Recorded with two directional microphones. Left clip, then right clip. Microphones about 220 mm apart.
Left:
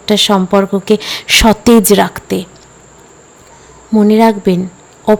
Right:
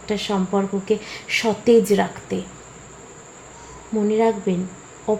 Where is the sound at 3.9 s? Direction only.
40° left (ahead or behind).